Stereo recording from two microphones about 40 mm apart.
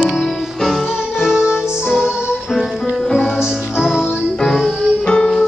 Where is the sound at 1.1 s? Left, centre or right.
Centre.